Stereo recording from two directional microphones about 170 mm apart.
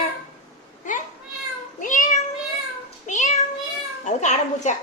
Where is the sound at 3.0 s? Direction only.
45° left (ahead or behind).